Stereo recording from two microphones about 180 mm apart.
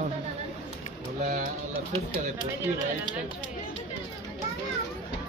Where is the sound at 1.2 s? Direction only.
45° right (ahead or behind).